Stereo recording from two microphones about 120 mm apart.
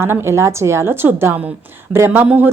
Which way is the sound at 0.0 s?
20° right (ahead or behind).